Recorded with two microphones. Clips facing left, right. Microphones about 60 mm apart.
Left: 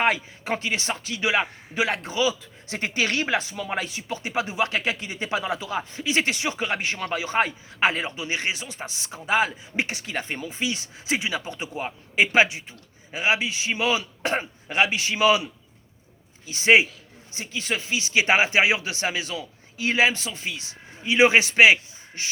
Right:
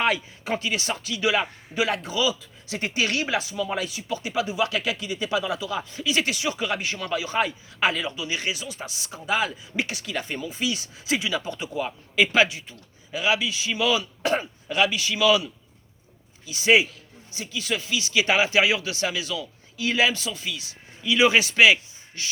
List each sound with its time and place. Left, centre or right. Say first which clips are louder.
0.0 s speech: left 1 dB; left
16.5 s speech: left 1 dB; left